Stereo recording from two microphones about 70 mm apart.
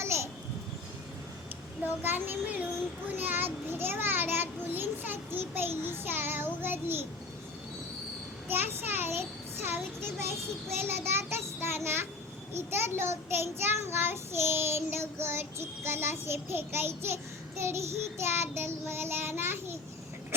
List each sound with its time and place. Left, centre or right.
0.0 s babbling: right
2.0 s a child's voice: right
8.4 s a child's voice: right
10.8 s child singing: right